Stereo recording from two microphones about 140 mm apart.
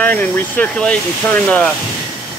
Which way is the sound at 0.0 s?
10° left (ahead or behind).